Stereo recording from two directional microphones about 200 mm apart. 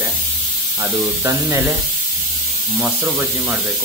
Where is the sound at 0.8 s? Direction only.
15° right (ahead or behind).